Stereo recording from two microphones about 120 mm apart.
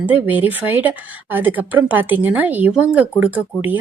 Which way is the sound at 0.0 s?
15° right (ahead or behind).